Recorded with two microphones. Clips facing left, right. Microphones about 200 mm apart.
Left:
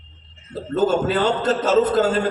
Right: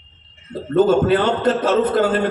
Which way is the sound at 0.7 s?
55° right (ahead or behind).